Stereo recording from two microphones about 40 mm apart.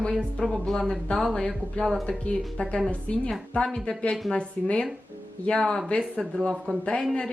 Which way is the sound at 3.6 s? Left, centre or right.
Centre.